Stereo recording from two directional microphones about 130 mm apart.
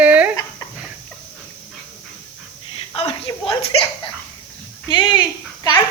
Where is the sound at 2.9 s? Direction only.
50° left (ahead or behind).